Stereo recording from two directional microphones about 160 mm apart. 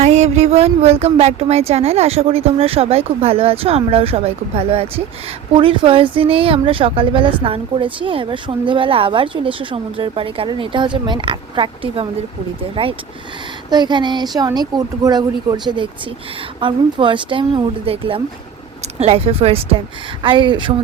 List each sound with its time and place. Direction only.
0.0 s speech: 45° right (ahead or behind)